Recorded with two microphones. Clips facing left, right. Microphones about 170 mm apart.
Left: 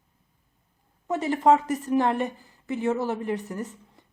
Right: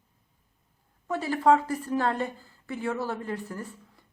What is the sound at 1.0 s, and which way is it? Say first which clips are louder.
A woman's voice: left 2 dB; 20° left (ahead or behind).